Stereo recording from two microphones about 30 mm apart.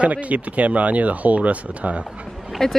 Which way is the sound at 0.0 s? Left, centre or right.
Right.